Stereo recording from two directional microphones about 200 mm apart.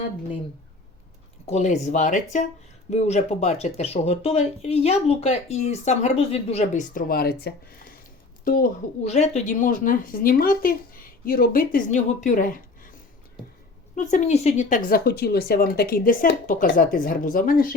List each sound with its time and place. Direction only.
1.5 s speech: 35° left (ahead or behind)
13.9 s speech: 35° left (ahead or behind)
14.8 s speech: 50° left (ahead or behind)